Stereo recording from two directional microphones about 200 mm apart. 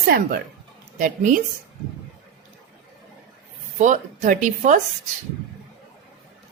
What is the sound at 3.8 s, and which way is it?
A woman's voice, 40° right (ahead or behind).